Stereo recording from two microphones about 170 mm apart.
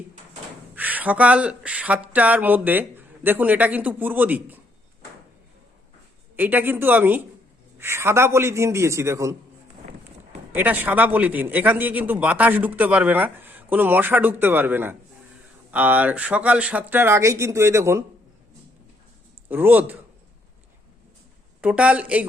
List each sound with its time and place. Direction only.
0.8 s a man's voice: 10° right (ahead or behind)
6.3 s a man's voice: 10° right (ahead or behind)
10.5 s a man's voice: 10° right (ahead or behind)
19.5 s a man's voice: 10° right (ahead or behind)
21.6 s a man's voice: 5° right (ahead or behind)